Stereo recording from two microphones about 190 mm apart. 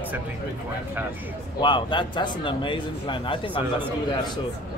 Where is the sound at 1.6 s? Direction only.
25° left (ahead or behind).